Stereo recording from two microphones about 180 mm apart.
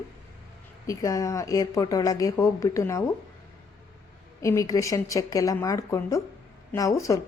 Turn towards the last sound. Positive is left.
turn(degrees=20)  # may be behind; listen again after turning